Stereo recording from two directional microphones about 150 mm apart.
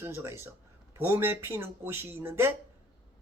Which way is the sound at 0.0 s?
20° right (ahead or behind).